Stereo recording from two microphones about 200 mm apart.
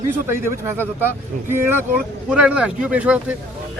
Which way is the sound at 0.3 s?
10° right (ahead or behind).